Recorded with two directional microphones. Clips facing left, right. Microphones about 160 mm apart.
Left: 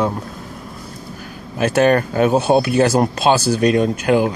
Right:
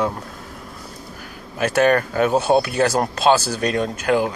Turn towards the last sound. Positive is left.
turn(degrees=20)  # may be behind; listen again after turning